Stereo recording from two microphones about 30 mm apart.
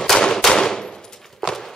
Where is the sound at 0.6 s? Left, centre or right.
Centre.